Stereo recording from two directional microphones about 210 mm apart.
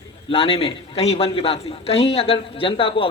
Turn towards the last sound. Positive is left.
turn(degrees=25)  # may be behind; listen again after turning